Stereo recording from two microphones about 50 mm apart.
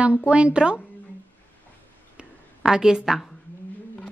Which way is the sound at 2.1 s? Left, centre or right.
Centre.